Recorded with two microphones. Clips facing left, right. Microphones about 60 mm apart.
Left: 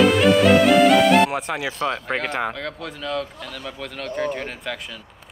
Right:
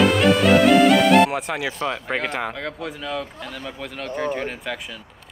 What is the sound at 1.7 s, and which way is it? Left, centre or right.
Speech, centre.